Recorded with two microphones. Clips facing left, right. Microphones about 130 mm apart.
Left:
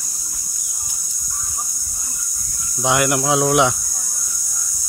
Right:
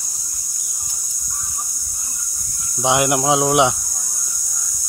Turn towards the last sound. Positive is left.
turn(degrees=-20)  # may be behind; listen again after turning